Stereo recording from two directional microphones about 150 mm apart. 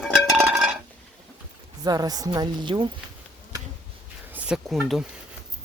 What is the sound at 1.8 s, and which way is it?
Speech, 25° right (ahead or behind).